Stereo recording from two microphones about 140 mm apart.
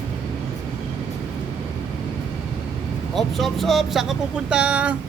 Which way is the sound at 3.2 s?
Centre (ahead or behind).